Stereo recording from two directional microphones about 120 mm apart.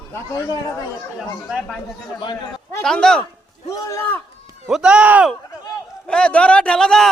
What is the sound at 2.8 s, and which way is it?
Speech, 5° left (ahead or behind).